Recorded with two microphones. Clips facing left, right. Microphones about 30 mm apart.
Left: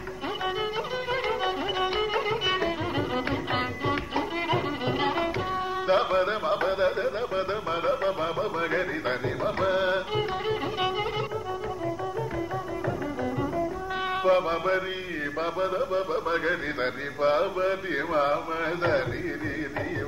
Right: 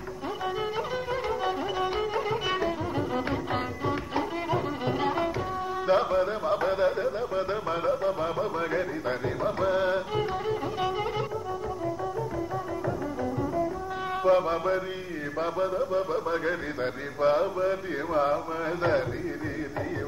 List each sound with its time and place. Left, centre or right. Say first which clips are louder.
1.1 s music: left 2 dB; left
3.5 s music: left 2 dB; left
6.6 s a sound: right 1 dB; left
8.4 s music: left 1 dB; left
14.1 s music: even; left
15.4 s a man's voice: right 1 dB; left
18.8 s a sound: even; centre